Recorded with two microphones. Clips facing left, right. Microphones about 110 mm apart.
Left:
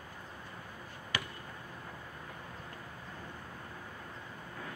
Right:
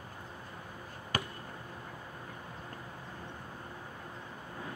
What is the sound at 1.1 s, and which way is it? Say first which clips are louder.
Basketball bounce: right 3 dB; 45° right (ahead or behind).